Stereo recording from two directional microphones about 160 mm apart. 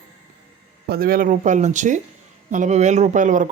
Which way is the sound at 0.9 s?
65° right (ahead or behind).